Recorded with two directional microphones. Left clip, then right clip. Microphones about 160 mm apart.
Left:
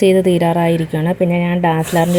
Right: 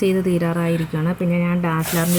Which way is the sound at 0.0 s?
20° left (ahead or behind).